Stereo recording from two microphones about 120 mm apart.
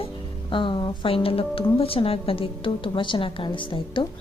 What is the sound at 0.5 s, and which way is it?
Speech, 45° left (ahead or behind).